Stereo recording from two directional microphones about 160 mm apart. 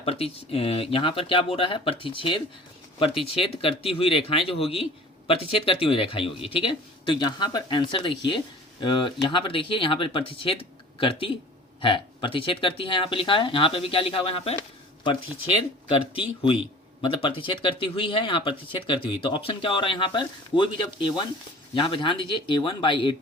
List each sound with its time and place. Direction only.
0.0 s speech: 40° left (ahead or behind)
15.9 s speech: 35° left (ahead or behind)